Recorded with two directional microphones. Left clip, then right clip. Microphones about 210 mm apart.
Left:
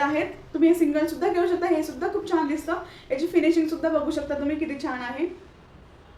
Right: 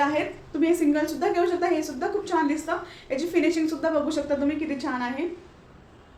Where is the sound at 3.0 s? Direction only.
10° right (ahead or behind).